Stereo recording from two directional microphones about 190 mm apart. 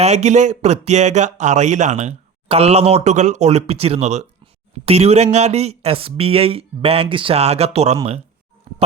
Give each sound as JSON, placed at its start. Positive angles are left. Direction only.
{"t": 0.0, "sound": "speech", "side_deg": -35}
{"t": 8.7, "sound": "music", "side_deg": -35}